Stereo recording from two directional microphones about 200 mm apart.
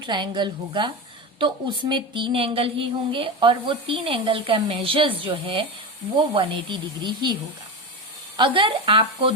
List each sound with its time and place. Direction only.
0.0 s speech: 20° right (ahead or behind)
8.4 s speech: 25° right (ahead or behind)